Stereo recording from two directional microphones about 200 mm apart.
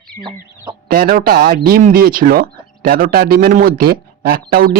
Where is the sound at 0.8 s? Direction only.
45° right (ahead or behind).